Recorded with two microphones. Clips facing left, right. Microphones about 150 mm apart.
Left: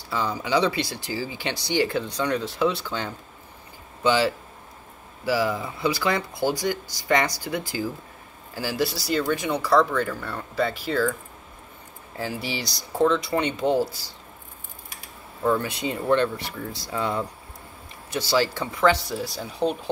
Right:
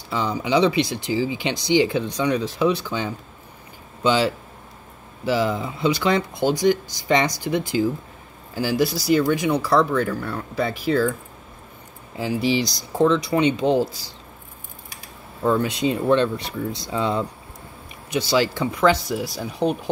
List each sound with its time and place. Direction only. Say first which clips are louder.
0.1 s speech: right 3 dB; 20° right (ahead or behind)
12.2 s speech: right 8 dB; 20° right (ahead or behind)
15.5 s speech: right 5 dB; 20° right (ahead or behind)